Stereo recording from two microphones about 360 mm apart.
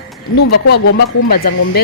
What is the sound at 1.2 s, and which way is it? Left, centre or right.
Speech, left.